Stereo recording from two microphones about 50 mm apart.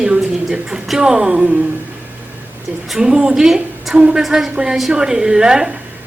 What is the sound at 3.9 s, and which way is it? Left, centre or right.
Speech, centre.